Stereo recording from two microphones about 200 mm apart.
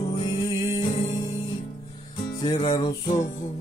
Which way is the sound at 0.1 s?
20° left (ahead or behind).